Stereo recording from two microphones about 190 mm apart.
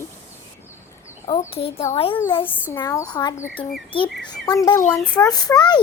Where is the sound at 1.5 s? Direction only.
30° left (ahead or behind).